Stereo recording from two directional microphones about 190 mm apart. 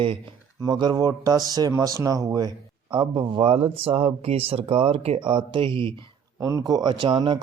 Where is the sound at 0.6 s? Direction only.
20° right (ahead or behind).